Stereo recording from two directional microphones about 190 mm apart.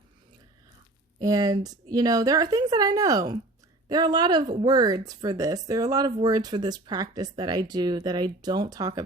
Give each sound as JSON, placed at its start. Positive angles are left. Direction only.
{"t": 1.2, "sound": "speech", "side_deg": -20}